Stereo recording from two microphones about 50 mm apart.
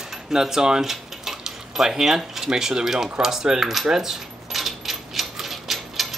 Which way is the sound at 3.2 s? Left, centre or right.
Centre.